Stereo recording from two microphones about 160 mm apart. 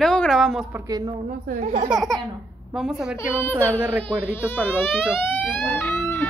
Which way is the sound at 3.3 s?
10° left (ahead or behind).